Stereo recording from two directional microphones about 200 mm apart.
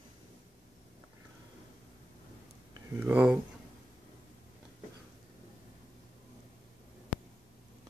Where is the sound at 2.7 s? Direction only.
10° right (ahead or behind).